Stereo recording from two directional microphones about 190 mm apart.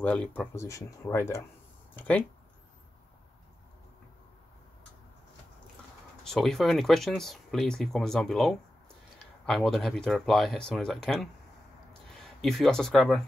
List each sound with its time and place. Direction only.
0.0 s speech: 5° left (ahead or behind)
6.2 s speech: centre (ahead or behind)
12.4 s speech: centre (ahead or behind)